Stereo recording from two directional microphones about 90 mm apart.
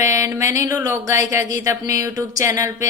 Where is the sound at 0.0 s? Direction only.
35° right (ahead or behind).